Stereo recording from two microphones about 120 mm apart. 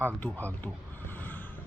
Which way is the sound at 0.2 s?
15° left (ahead or behind).